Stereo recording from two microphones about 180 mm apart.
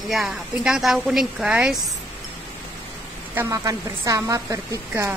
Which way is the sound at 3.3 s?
15° right (ahead or behind).